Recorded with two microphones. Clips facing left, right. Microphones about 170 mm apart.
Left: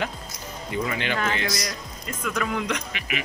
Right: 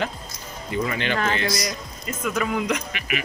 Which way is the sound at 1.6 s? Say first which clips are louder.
Right 3 dB; 10° right (ahead or behind).